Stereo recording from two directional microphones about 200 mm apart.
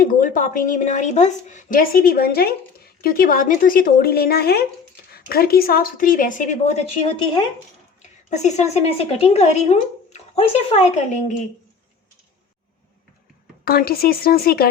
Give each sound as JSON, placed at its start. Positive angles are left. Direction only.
{"t": 0.0, "sound": "speech", "side_deg": 45}
{"t": 13.7, "sound": "speech", "side_deg": 50}